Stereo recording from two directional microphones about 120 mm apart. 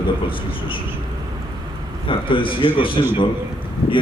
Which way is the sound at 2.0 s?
45° left (ahead or behind).